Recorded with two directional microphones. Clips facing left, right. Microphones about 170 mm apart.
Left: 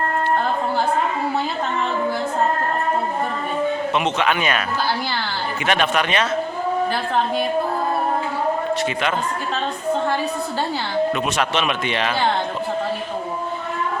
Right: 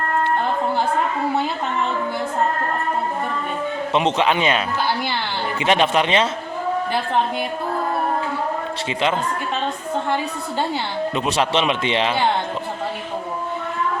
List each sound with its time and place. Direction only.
3.9 s a man's voice: 25° right (ahead or behind)
5.6 s a man's voice: 25° right (ahead or behind)
11.1 s a man's voice: 25° right (ahead or behind)